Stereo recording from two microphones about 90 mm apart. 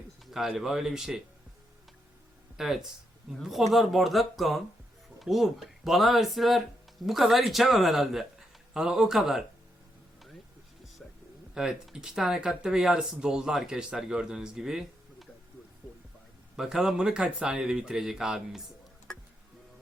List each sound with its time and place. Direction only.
0.3 s a man's voice: 5° right (ahead or behind)
2.6 s a man's voice: 5° right (ahead or behind)
11.5 s speech: 5° right (ahead or behind)
16.6 s speech: 5° right (ahead or behind)